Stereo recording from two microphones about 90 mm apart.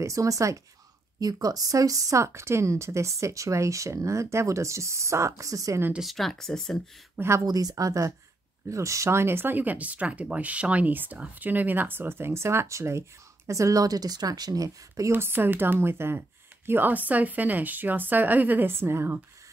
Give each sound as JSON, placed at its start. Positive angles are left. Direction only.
{"t": 0.0, "sound": "a woman's voice", "side_deg": -35}
{"t": 5.9, "sound": "speech", "side_deg": 0}
{"t": 7.2, "sound": "a woman's voice", "side_deg": -30}
{"t": 7.4, "sound": "a woman's voice", "side_deg": -45}
{"t": 15.0, "sound": "speech", "side_deg": -25}